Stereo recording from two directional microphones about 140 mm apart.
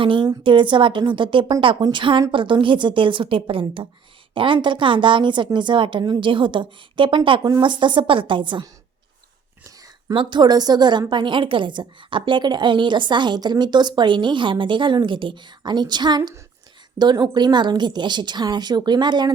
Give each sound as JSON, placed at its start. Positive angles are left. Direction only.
{"t": 0.0, "sound": "a woman's voice", "side_deg": -35}